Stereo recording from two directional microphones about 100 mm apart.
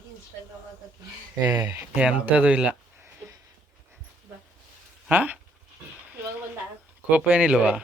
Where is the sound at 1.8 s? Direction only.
10° right (ahead or behind).